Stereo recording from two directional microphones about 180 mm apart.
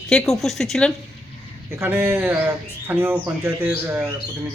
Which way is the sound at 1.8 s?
15° right (ahead or behind).